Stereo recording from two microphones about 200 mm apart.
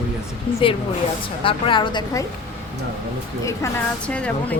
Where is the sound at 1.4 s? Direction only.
25° left (ahead or behind).